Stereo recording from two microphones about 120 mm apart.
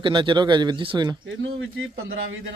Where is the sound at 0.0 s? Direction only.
45° right (ahead or behind).